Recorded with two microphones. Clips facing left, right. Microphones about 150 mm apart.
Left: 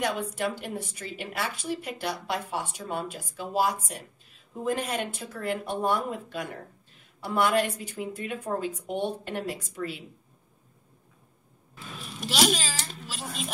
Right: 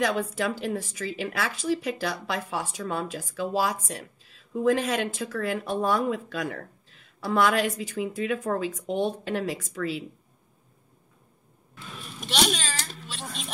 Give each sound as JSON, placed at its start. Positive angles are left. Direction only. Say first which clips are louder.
{"t": 0.0, "sound": "a woman's voice", "louder": "right 3 dB", "side_deg": -90}
{"t": 12.2, "sound": "a child's voice", "louder": "left 1 dB", "side_deg": 0}